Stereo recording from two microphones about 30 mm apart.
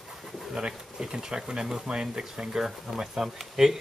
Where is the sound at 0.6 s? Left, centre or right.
Right.